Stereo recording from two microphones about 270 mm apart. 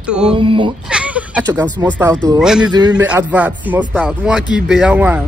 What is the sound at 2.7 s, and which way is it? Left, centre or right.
Speech, centre.